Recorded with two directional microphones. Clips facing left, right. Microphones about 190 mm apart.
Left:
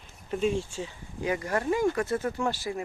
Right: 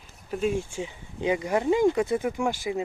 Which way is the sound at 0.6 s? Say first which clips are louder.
Right 2 dB; 15° right (ahead or behind).